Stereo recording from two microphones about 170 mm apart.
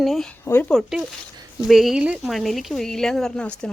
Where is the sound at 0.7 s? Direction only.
Centre (ahead or behind).